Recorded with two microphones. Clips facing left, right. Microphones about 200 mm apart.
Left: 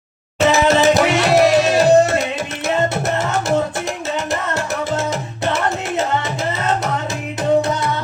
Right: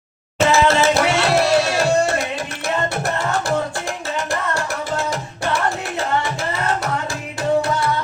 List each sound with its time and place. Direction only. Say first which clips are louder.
0.4 s music: left 2 dB; 20° left (ahead or behind)
4.3 s music: left 2 dB; 20° left (ahead or behind)